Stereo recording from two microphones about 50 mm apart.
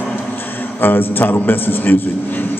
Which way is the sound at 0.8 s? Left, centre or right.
Left.